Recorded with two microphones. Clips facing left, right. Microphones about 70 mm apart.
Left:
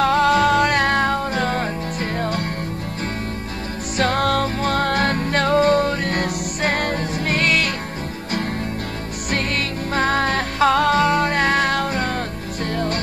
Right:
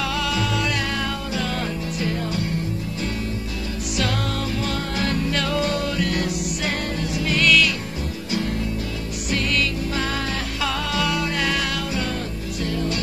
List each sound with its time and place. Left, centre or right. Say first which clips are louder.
0.0 s music: left 9 dB; left
4.0 s music: left 8 dB; left
9.3 s music: even; left